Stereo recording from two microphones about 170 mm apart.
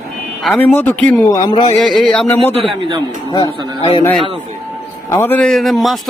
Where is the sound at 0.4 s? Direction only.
Centre (ahead or behind).